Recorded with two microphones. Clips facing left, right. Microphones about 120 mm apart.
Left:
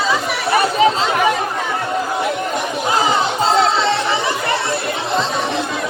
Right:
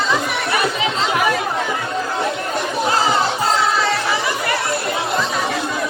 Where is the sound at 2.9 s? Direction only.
15° left (ahead or behind).